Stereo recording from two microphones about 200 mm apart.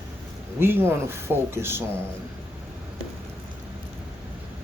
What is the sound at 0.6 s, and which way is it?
Speech, 10° right (ahead or behind).